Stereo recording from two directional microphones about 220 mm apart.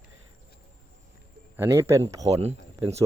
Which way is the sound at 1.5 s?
10° right (ahead or behind).